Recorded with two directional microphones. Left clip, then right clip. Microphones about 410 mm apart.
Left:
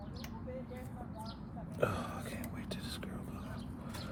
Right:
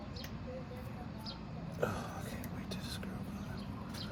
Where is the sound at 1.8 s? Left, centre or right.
Left.